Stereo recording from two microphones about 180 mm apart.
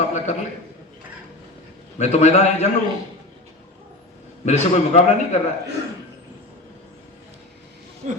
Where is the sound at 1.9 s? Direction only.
40° left (ahead or behind).